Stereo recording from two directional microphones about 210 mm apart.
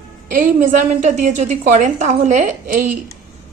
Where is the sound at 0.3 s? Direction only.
40° right (ahead or behind).